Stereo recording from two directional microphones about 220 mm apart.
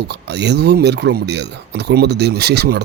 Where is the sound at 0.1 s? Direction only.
50° right (ahead or behind).